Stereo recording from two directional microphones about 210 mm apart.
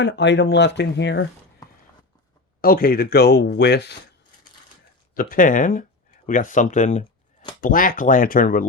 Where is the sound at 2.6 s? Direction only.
45° left (ahead or behind).